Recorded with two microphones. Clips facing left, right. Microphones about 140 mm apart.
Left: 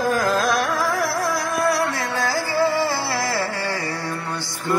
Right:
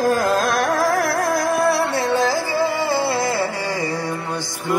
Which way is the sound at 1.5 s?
30° right (ahead or behind).